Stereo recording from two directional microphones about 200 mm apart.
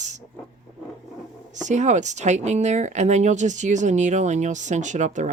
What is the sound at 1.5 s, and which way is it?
Speech, 35° right (ahead or behind).